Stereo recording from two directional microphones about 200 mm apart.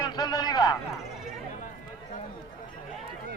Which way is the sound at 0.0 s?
20° left (ahead or behind).